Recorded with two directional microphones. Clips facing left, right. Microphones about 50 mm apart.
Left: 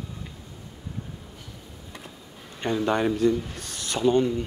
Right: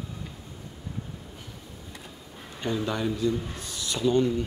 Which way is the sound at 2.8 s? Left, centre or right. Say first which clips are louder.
Left 7 dB; left.